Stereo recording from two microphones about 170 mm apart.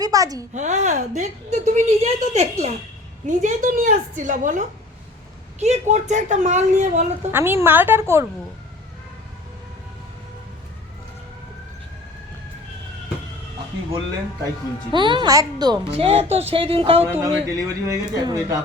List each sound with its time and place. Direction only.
0.0 s speech: 20° right (ahead or behind)
0.5 s a woman's voice: 45° right (ahead or behind)
7.3 s a woman's voice: 15° right (ahead or behind)
14.9 s speech: 25° right (ahead or behind)
15.9 s speech: 35° right (ahead or behind)
17.1 s speech: 15° right (ahead or behind)